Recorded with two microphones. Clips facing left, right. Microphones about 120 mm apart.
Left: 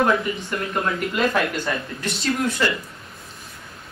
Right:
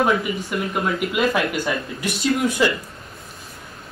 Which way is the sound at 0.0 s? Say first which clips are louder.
Even; 10° right (ahead or behind).